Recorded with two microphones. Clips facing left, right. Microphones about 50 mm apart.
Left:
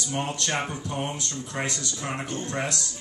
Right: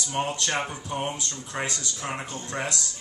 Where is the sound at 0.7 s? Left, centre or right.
Centre.